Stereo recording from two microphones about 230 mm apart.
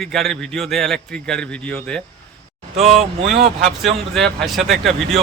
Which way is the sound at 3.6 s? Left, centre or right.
Centre.